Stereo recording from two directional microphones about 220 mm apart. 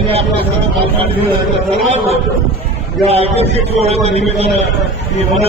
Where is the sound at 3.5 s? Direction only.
30° right (ahead or behind).